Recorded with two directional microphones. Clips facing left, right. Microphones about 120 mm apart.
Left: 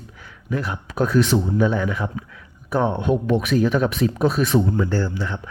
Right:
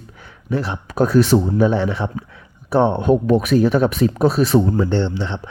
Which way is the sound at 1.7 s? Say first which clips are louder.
Right 3 dB; 30° right (ahead or behind).